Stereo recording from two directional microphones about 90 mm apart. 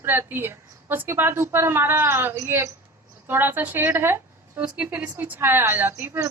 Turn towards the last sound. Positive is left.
turn(degrees=-25)  # may be behind; listen again after turning